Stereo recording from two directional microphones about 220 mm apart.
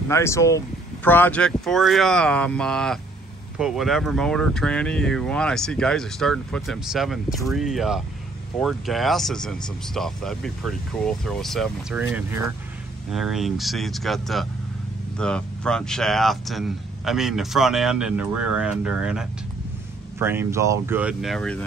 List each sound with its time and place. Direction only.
0.1 s speech: 15° left (ahead or behind)